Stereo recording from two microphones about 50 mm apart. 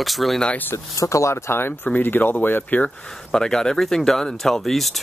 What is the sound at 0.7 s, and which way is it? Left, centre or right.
Speech, left.